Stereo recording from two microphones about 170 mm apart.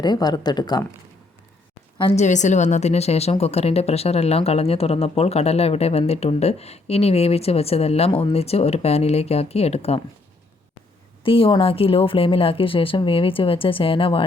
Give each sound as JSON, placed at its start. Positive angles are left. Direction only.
{"t": 0.0, "sound": "speech", "side_deg": 25}
{"t": 2.0, "sound": "a woman's voice", "side_deg": 35}
{"t": 11.2, "sound": "a woman's voice", "side_deg": 30}